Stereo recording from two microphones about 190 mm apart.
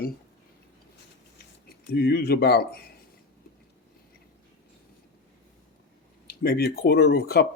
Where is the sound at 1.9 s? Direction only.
55° left (ahead or behind).